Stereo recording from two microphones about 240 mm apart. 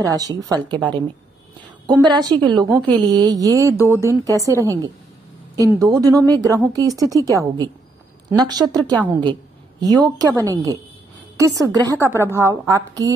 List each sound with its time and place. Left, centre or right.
0.0 s a woman's voice: centre
1.9 s a woman's voice: centre
9.0 s a sound: centre
10.0 s a woman's voice: centre